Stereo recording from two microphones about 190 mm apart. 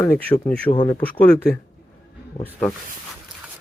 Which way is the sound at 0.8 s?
25° left (ahead or behind).